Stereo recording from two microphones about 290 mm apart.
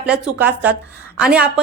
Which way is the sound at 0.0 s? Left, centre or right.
Centre.